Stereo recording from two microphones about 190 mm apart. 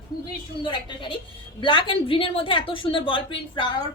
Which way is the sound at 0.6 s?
25° left (ahead or behind).